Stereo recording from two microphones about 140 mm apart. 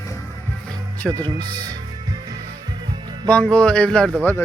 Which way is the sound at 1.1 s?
30° right (ahead or behind).